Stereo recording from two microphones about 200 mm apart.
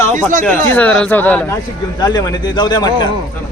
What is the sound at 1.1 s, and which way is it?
Speech, 10° left (ahead or behind).